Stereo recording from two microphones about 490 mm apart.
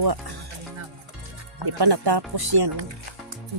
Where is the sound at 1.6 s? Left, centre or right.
Right.